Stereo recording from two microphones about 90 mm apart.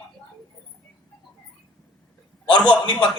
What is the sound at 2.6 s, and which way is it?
Speech, 15° left (ahead or behind).